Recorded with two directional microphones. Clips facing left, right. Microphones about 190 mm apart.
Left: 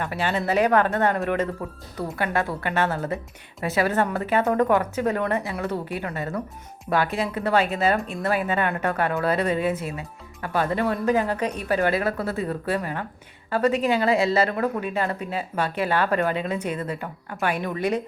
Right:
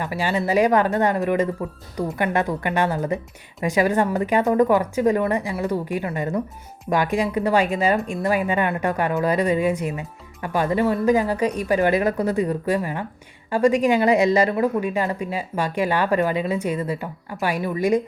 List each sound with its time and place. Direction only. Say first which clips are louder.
0.0 s speech: right 2 dB; 10° right (ahead or behind)